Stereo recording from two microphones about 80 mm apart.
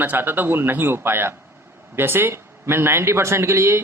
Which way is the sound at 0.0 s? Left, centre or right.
Right.